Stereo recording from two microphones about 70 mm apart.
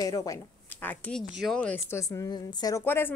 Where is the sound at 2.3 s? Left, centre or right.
Left.